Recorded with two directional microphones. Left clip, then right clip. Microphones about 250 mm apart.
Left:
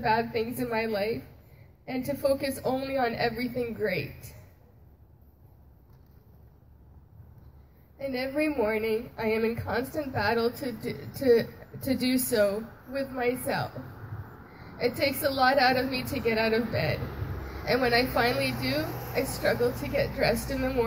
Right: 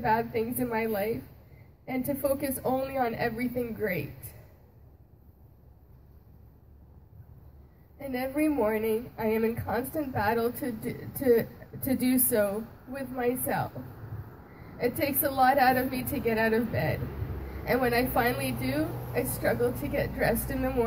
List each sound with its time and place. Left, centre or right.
0.0 s speech: right
8.0 s speech: right
14.8 s speech: right